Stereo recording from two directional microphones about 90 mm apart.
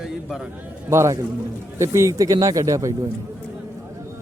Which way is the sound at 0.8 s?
35° right (ahead or behind).